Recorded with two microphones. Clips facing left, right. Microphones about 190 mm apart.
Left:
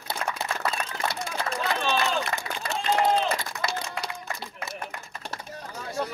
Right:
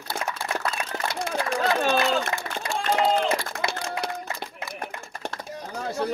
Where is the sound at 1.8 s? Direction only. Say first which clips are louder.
Right 3 dB; 50° right (ahead or behind).